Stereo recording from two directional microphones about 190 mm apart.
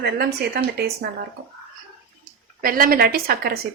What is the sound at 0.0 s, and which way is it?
Speech, 55° right (ahead or behind).